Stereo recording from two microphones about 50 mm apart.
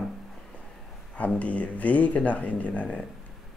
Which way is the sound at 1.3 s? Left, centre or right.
Left.